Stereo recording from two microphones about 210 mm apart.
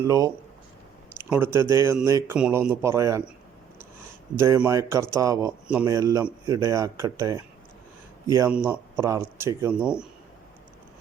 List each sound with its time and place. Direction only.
0.0 s speech: 15° right (ahead or behind)
4.4 s speech: 10° right (ahead or behind)